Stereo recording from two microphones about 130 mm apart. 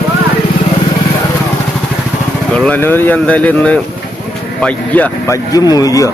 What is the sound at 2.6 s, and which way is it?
Speech, 10° left (ahead or behind).